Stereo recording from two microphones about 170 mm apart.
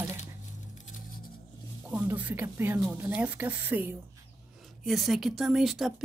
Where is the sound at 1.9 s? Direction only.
10° right (ahead or behind).